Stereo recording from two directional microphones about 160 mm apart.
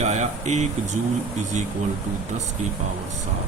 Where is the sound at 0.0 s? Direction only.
45° right (ahead or behind).